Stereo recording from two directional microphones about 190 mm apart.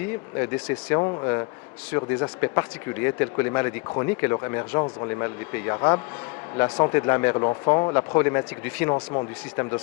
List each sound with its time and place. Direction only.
0.3 s speech: 15° left (ahead or behind)
9.0 s speech: 25° left (ahead or behind)